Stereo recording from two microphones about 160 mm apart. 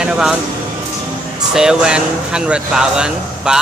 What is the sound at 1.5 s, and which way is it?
Speech, 5° right (ahead or behind).